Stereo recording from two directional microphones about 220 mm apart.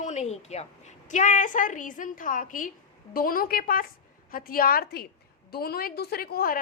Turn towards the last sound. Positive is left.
turn(degrees=45)  # may be behind; listen again after turning